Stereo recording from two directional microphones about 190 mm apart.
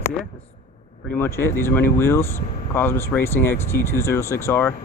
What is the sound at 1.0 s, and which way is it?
Speech, 10° left (ahead or behind).